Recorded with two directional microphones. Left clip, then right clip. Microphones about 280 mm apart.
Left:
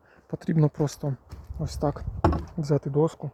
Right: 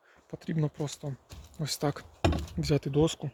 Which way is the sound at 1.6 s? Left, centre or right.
Centre.